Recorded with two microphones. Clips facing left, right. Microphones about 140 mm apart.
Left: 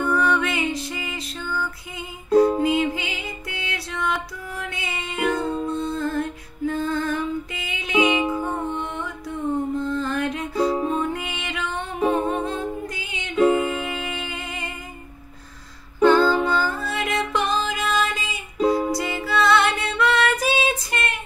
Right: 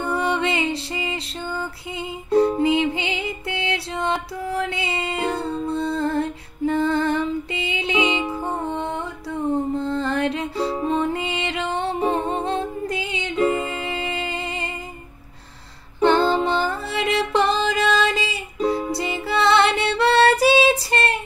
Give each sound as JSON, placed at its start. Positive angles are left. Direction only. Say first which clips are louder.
{"t": 0.0, "sound": "music", "louder": "left 1 dB", "side_deg": -25}
{"t": 16.0, "sound": "music", "louder": "left 1 dB", "side_deg": -25}
{"t": 18.0, "sound": "female singing", "louder": "right 5 dB", "side_deg": -90}
{"t": 18.9, "sound": "music", "louder": "even", "side_deg": -25}